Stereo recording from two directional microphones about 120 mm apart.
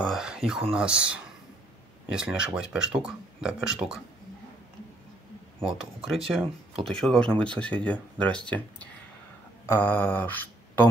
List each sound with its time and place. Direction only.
0.0 s speech: 5° right (ahead or behind)
5.6 s speech: 50° right (ahead or behind)
6.0 s speech: centre (ahead or behind)
9.7 s mantra: 15° left (ahead or behind)